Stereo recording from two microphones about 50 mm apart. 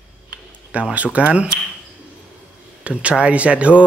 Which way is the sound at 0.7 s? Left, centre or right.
Right.